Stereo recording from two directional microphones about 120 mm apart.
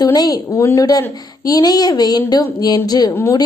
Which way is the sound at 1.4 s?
30° left (ahead or behind).